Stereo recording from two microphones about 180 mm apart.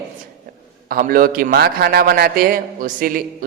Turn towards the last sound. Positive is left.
turn(degrees=-50)  # may be behind; listen again after turning